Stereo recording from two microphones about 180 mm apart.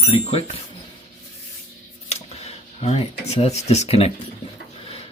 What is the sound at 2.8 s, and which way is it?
Speech, 35° left (ahead or behind).